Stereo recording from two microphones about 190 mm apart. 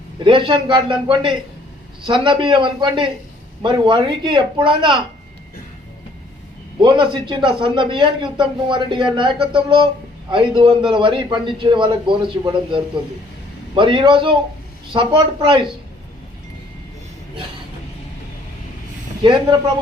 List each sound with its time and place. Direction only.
0.3 s a man's voice: 25° right (ahead or behind)
6.8 s a man's voice: 25° right (ahead or behind)
19.2 s a man's voice: 25° right (ahead or behind)